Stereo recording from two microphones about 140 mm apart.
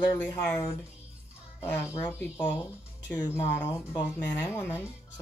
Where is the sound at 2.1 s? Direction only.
15° left (ahead or behind).